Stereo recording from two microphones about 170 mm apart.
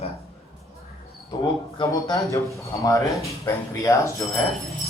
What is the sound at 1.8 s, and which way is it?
Speech, 20° left (ahead or behind).